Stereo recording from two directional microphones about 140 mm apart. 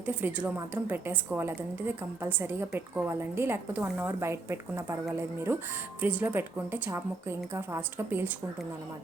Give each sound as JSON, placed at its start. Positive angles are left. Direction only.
{"t": 0.0, "sound": "a woman's voice", "side_deg": -10}